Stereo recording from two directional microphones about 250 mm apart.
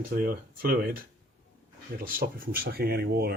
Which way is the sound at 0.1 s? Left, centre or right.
Right.